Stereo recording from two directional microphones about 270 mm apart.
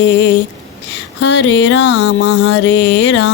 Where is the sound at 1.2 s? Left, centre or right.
Left.